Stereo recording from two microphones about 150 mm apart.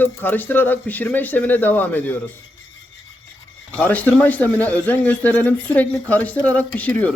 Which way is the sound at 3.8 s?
10° left (ahead or behind).